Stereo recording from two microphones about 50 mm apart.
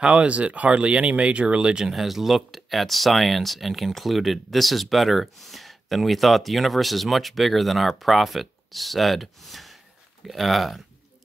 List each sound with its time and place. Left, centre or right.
0.0 s speech: right
2.0 s speech: centre